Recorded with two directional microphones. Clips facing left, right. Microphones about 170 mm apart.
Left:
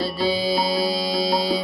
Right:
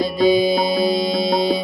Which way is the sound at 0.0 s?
20° right (ahead or behind).